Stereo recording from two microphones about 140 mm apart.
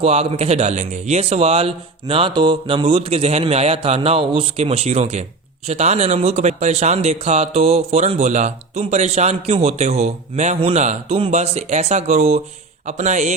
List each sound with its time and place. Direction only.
0.0 s a man's voice: 45° right (ahead or behind)